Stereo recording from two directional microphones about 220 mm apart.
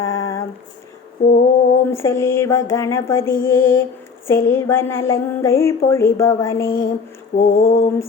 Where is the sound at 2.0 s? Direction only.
10° left (ahead or behind).